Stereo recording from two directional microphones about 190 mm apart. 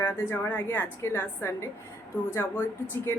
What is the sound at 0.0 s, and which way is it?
A woman's voice, 10° left (ahead or behind).